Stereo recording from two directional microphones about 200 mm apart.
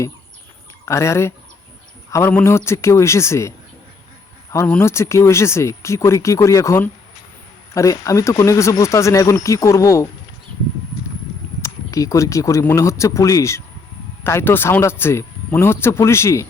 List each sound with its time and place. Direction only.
0.9 s speech: 15° left (ahead or behind)
4.5 s speech: 10° left (ahead or behind)
11.6 s speech: 15° left (ahead or behind)